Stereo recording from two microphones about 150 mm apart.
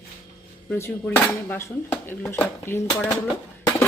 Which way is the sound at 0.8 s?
15° left (ahead or behind).